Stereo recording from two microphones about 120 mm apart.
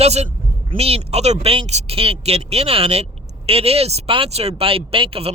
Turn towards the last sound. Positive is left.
turn(degrees=-50)  # may be behind; listen again after turning